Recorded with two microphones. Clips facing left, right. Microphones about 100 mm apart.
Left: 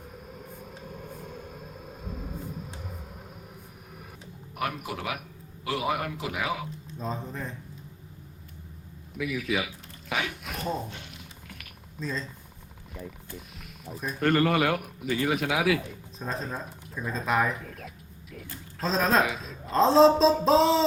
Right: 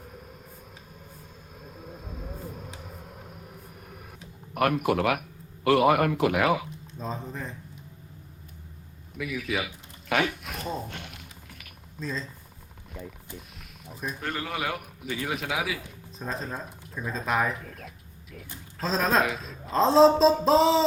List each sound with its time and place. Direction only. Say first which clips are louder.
0.0 s vehicle: left 2 dB; centre (ahead or behind)
4.5 s speech: right 9 dB; 60° right (ahead or behind)
7.0 s a man's voice: even; centre (ahead or behind)
9.1 s a man's voice: left 1 dB; centre (ahead or behind)
10.8 s speech: right 2 dB; 60° right (ahead or behind)
11.4 s a sound: left 2 dB; centre (ahead or behind)
12.9 s speech: even; centre (ahead or behind)
14.2 s speech: left 13 dB; 70° left (ahead or behind)
14.5 s a man's voice: left 6 dB; centre (ahead or behind)